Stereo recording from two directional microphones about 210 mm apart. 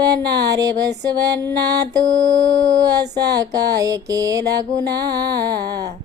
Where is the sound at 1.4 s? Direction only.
50° right (ahead or behind).